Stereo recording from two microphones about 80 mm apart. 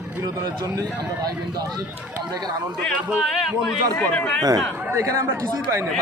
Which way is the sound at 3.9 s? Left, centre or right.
Centre.